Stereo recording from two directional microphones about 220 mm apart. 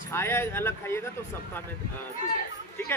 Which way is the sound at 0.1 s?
10° left (ahead or behind).